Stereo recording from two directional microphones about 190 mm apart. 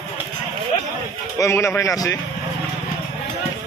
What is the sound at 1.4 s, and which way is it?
Speech, 15° left (ahead or behind).